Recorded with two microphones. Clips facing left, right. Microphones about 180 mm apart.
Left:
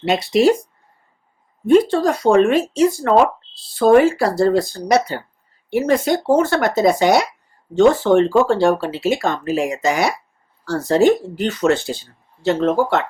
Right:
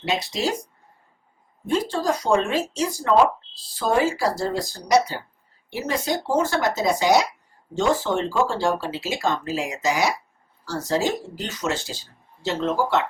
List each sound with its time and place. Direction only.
0.0 s speech: 60° left (ahead or behind)
1.6 s speech: 60° left (ahead or behind)